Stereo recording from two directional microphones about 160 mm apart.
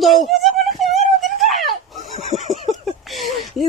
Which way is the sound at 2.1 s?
40° left (ahead or behind).